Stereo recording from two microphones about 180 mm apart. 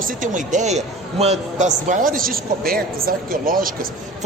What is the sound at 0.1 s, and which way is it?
A man's voice, 45° right (ahead or behind).